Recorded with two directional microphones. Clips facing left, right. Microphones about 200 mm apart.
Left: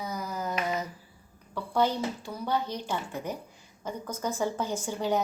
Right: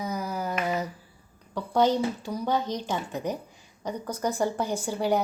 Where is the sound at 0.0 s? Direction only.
15° right (ahead or behind).